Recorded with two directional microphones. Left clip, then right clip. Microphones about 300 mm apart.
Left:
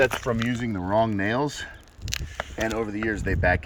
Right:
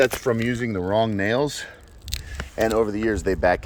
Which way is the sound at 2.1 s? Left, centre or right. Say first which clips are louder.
Left 2 dB; centre.